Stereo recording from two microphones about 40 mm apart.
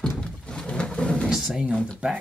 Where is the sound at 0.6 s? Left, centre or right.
Left.